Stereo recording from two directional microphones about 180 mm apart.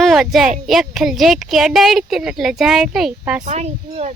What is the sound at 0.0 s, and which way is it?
A child's voice, centre (ahead or behind).